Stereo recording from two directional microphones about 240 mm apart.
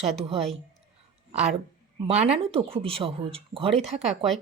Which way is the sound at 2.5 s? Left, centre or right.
Right.